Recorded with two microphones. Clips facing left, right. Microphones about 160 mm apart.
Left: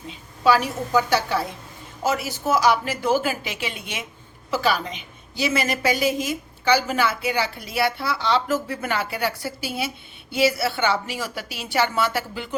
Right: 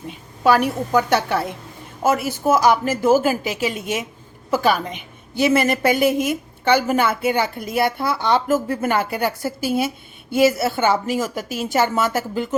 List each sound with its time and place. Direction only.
0.1 s a woman's voice: 55° right (ahead or behind)